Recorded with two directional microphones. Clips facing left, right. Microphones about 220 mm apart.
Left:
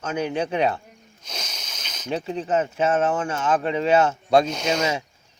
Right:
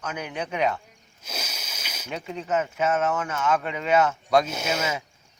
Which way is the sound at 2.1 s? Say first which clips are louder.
Left 4 dB; 30° left (ahead or behind).